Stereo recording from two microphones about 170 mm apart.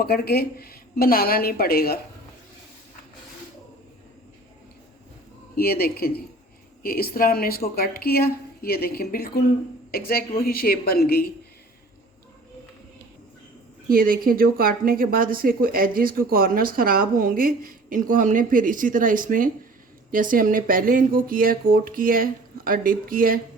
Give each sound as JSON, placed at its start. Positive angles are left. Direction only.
{"t": 0.0, "sound": "a woman's voice", "side_deg": 65}
{"t": 5.5, "sound": "a woman's voice", "side_deg": 65}
{"t": 13.9, "sound": "speech", "side_deg": -60}